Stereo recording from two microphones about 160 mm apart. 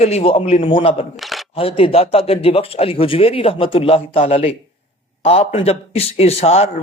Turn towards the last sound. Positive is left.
turn(degrees=40)  # may be behind; listen again after turning